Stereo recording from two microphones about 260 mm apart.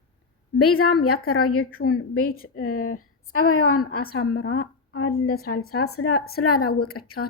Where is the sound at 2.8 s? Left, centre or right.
Left.